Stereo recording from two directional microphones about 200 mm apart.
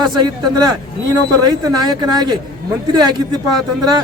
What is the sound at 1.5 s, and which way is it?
Speech, 20° right (ahead or behind).